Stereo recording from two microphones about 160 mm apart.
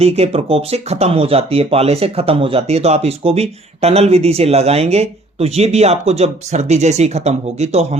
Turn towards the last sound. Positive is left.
turn(degrees=-45)  # may be behind; listen again after turning